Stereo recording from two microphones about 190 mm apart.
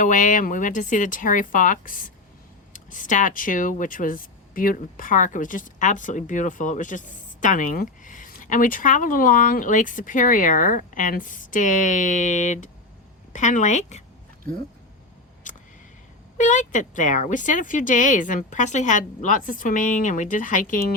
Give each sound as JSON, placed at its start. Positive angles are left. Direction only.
{"t": 0.0, "sound": "speech", "side_deg": 45}
{"t": 15.5, "sound": "a sound", "side_deg": 40}
{"t": 16.4, "sound": "speech", "side_deg": 40}